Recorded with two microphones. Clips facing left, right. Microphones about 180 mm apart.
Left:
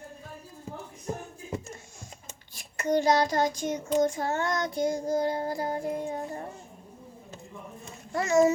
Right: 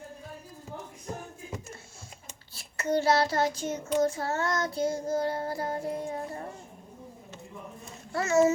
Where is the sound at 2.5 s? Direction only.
15° left (ahead or behind).